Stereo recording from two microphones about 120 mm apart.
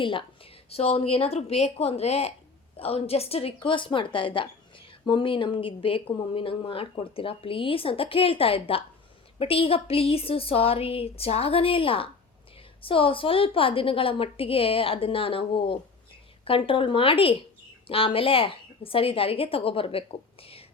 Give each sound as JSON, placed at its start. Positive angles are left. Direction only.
{"t": 0.0, "sound": "a woman's voice", "side_deg": 45}
{"t": 0.7, "sound": "a woman's voice", "side_deg": 60}